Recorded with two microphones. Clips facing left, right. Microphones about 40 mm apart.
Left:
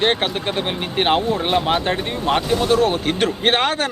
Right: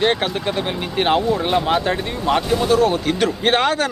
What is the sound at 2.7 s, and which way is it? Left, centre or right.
Speech, left.